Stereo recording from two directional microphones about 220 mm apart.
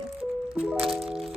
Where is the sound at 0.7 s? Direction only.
5° right (ahead or behind).